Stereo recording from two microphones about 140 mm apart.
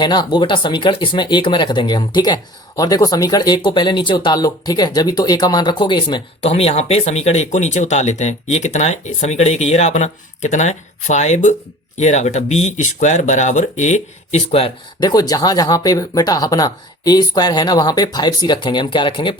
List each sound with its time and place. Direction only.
0.0 s speech: 30° left (ahead or behind)
6.4 s speech: 45° left (ahead or behind)
15.0 s speech: 25° left (ahead or behind)